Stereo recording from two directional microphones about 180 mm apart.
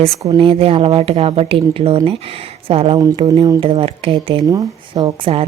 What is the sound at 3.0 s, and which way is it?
Speech, 20° right (ahead or behind).